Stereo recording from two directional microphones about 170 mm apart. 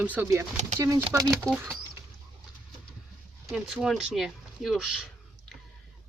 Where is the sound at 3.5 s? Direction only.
5° right (ahead or behind).